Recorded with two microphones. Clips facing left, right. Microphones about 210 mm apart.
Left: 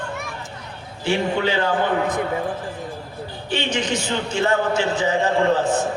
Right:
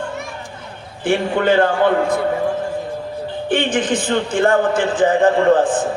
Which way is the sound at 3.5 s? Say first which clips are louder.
Right 5 dB; 50° right (ahead or behind).